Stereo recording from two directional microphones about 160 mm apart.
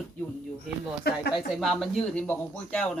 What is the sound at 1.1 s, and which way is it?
Speech, 80° left.